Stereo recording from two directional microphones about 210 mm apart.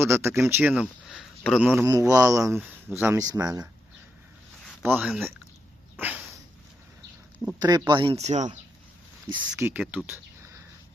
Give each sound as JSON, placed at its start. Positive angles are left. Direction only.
{"t": 0.0, "sound": "speech", "side_deg": -10}
{"t": 1.8, "sound": "speech", "side_deg": -15}
{"t": 4.8, "sound": "speech", "side_deg": -5}
{"t": 6.0, "sound": "dog", "side_deg": -5}
{"t": 7.6, "sound": "speech", "side_deg": -20}
{"t": 9.6, "sound": "speech", "side_deg": -10}
{"t": 10.1, "sound": "a sound", "side_deg": -15}